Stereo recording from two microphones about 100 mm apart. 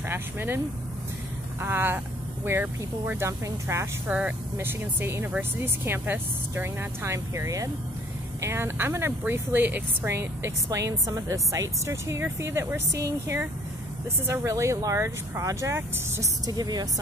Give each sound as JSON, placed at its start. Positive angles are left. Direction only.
{"t": 0.1, "sound": "speech", "side_deg": -25}
{"t": 1.6, "sound": "speech", "side_deg": -20}
{"t": 4.1, "sound": "speech", "side_deg": -15}
{"t": 4.6, "sound": "speech", "side_deg": -25}